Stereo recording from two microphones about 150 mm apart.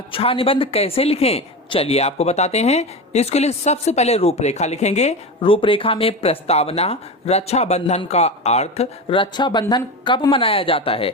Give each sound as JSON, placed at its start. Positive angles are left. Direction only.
{"t": 0.1, "sound": "speech", "side_deg": 40}